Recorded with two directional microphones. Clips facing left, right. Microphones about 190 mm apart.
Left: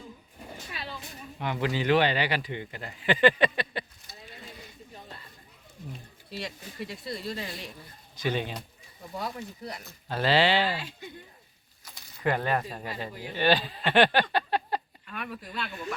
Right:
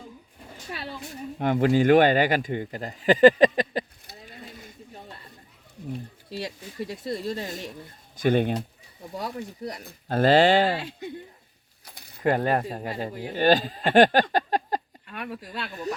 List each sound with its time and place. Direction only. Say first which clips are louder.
1.4 s speech: right 9 dB; 50° right (ahead or behind)
6.3 s speech: right 4 dB; 35° right (ahead or behind); by 8.5 s 55° right (ahead or behind)
9.1 s speech: right 3 dB; 40° right (ahead or behind)
11.9 s a sound: right 4 dB; 55° right (ahead or behind)
12.3 s speech: right 5 dB; 40° right (ahead or behind)
15.1 s speech: right 2 dB; 30° right (ahead or behind)